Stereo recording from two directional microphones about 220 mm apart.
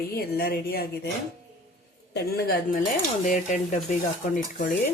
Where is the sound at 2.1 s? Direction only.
45° left (ahead or behind).